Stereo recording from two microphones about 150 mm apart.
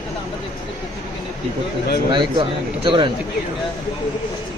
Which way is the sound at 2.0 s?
35° right (ahead or behind).